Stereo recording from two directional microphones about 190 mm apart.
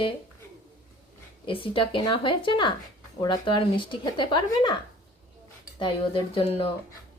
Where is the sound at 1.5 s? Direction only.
25° left (ahead or behind).